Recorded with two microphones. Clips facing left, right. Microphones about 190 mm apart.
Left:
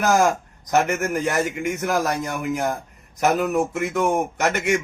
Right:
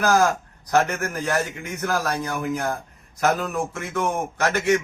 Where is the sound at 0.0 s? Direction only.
20° left (ahead or behind).